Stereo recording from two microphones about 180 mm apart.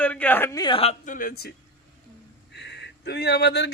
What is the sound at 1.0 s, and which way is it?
Speech, 50° left (ahead or behind).